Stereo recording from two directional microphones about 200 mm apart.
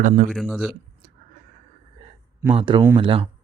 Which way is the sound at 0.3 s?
Centre (ahead or behind).